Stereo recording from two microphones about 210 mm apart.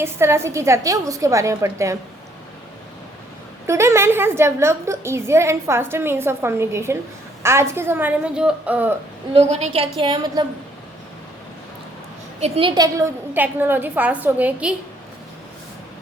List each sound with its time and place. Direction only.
0.0 s a woman's voice: 10° right (ahead or behind)
3.7 s a woman's voice: 15° right (ahead or behind)
9.3 s a woman's voice: 30° right (ahead or behind)
12.4 s a woman's voice: 25° right (ahead or behind); by 14.8 s 5° right (ahead or behind)